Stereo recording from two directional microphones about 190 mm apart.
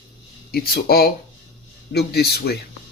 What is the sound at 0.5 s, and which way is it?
Speech, 55° left (ahead or behind).